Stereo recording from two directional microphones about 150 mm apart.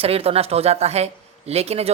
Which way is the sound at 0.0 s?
40° right (ahead or behind).